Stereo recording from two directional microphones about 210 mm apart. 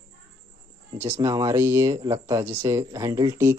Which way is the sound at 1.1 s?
15° right (ahead or behind).